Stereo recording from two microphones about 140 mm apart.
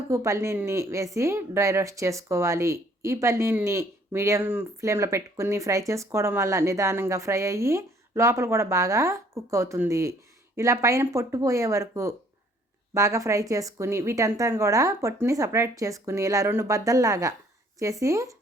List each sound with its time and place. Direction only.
0.1 s speech: 20° right (ahead or behind)